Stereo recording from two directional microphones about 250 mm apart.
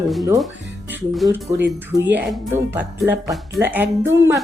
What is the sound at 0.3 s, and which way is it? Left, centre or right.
Speech, centre.